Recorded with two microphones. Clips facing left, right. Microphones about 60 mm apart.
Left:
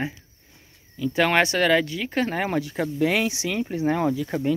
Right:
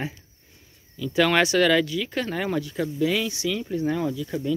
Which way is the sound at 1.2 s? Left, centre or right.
Left.